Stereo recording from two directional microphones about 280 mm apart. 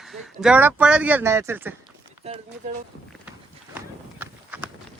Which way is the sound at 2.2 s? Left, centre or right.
Right.